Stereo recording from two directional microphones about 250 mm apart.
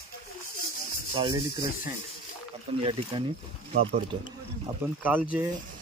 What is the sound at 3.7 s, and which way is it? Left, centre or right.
Speech, right.